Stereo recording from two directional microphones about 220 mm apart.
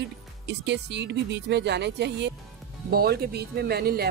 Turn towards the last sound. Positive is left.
turn(degrees=-45)  # may be behind; listen again after turning